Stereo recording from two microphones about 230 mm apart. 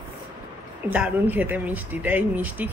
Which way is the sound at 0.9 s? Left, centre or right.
Centre.